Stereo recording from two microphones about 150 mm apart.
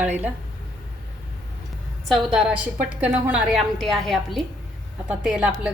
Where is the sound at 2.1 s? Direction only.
5° right (ahead or behind).